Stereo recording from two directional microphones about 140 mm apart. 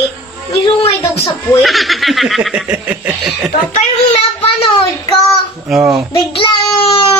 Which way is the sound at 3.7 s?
45° left (ahead or behind).